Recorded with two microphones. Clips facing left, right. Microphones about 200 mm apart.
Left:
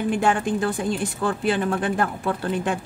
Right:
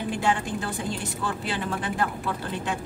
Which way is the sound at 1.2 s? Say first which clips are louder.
Left 8 dB; 55° left (ahead or behind).